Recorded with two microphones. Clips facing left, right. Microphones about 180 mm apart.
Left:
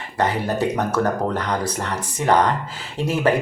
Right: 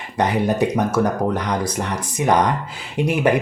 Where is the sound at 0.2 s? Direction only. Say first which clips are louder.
Right 3 dB; 15° right (ahead or behind).